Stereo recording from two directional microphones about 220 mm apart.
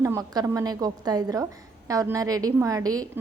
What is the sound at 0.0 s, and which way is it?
A woman's voice, 15° right (ahead or behind).